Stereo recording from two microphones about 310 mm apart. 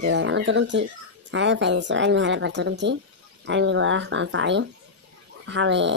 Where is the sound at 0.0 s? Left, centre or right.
Right.